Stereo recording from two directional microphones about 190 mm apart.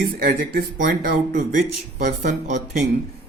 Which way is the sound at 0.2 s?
60° right (ahead or behind).